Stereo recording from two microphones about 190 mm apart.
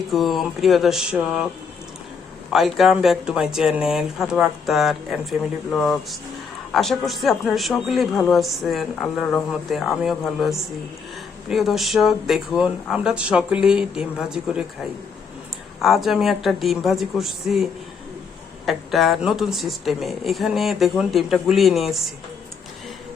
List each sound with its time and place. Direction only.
0.1 s speech: centre (ahead or behind)
2.5 s speech: centre (ahead or behind)
15.8 s speech: centre (ahead or behind)